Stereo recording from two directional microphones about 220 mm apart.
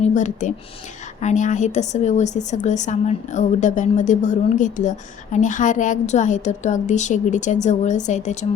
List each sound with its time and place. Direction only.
0.0 s a woman's voice: 35° left (ahead or behind)